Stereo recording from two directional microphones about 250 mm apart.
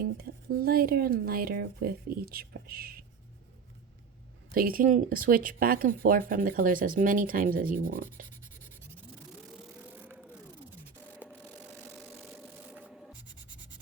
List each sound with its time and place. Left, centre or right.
0.0 s speech: right
4.5 s speech: right
12.7 s a sound: centre